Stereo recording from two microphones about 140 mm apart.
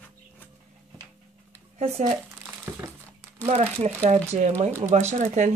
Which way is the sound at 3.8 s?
55° right (ahead or behind).